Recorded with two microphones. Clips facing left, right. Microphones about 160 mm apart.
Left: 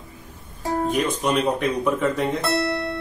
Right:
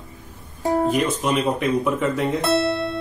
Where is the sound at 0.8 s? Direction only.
5° right (ahead or behind).